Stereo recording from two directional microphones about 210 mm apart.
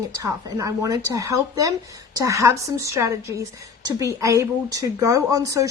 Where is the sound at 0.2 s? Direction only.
15° right (ahead or behind).